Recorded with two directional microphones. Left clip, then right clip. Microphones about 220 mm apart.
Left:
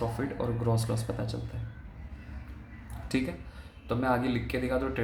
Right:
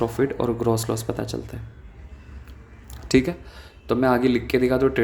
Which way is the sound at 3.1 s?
45° right (ahead or behind).